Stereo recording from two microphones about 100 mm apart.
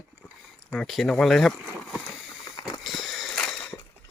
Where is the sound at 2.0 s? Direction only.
35° left (ahead or behind).